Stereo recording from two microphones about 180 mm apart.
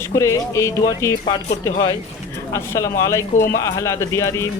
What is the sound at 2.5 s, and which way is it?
Speech, 15° left (ahead or behind).